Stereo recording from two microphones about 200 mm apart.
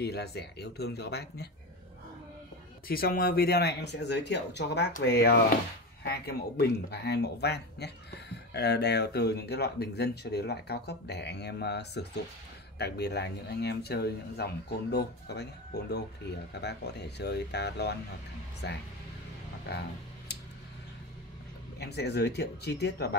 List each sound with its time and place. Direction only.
0.0 s speech: 55° left (ahead or behind)
2.9 s speech: 45° left (ahead or behind)
20.3 s a sound: 55° left (ahead or behind)
21.7 s speech: 55° left (ahead or behind)